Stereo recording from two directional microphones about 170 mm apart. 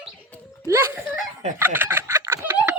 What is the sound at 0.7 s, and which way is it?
Speech, 15° right (ahead or behind).